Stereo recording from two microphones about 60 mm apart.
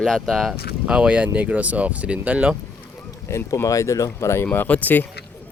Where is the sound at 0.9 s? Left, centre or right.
Centre.